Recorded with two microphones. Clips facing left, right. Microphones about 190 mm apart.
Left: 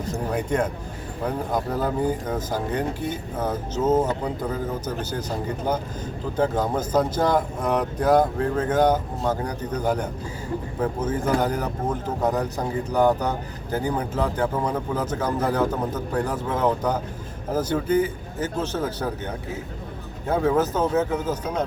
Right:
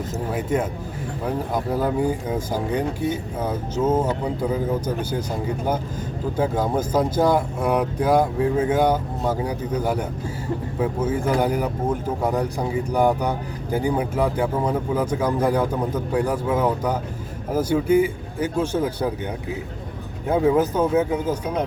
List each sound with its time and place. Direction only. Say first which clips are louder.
0.3 s speech: even; 5° right (ahead or behind)
1.7 s speech: right 4 dB; 10° right (ahead or behind)
6.3 s speech: right 1 dB; 10° right (ahead or behind)